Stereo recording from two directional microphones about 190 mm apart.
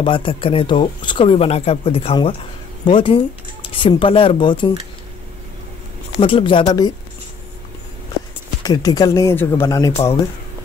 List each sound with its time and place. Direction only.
0.0 s speech: 25° left (ahead or behind)
6.1 s speech: 30° left (ahead or behind)
8.6 s speech: 20° left (ahead or behind)